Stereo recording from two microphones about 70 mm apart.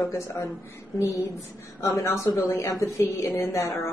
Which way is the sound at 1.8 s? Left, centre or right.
Left.